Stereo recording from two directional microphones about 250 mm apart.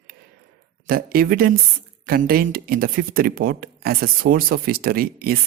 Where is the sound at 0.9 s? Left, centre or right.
Right.